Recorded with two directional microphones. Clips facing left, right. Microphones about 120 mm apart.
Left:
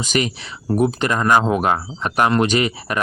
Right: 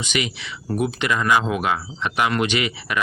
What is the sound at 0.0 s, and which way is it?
Speech, 40° left (ahead or behind).